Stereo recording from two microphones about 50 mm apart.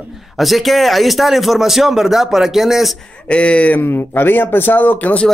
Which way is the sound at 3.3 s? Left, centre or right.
Left.